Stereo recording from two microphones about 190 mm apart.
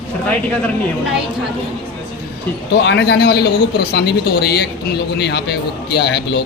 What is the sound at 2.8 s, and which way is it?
Speech, 60° left (ahead or behind).